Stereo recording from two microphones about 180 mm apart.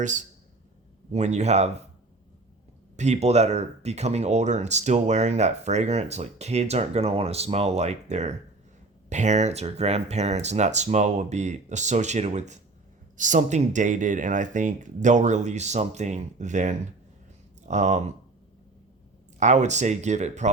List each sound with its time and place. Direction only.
0.0 s speech: 45° right (ahead or behind)
2.9 s speech: 40° right (ahead or behind)
19.4 s speech: 40° right (ahead or behind)